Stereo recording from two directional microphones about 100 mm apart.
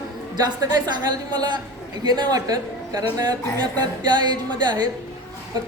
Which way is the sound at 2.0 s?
45° right (ahead or behind).